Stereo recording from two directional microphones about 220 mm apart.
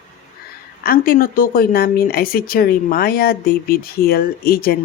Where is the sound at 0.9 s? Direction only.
40° left (ahead or behind).